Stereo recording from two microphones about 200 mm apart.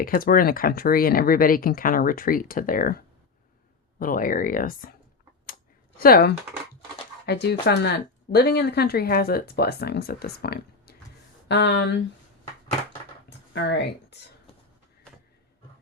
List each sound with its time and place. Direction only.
0.0 s speech: 45° left (ahead or behind)
6.0 s speech: 50° left (ahead or behind)
13.5 s speech: 60° left (ahead or behind)